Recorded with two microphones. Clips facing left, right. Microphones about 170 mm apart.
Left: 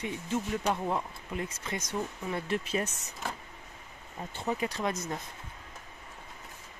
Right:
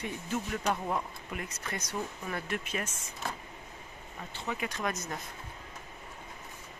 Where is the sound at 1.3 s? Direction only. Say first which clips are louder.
Left 3 dB; 25° left (ahead or behind).